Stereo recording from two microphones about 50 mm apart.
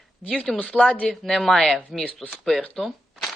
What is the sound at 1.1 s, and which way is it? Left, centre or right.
Speech, centre.